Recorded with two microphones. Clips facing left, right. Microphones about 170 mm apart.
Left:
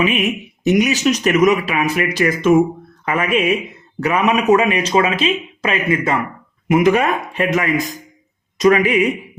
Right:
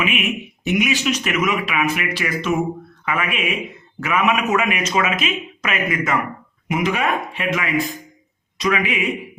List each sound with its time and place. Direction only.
0.0 s speech: 35° left (ahead or behind)
3.1 s speech: 40° left (ahead or behind)
6.7 s speech: 50° left (ahead or behind)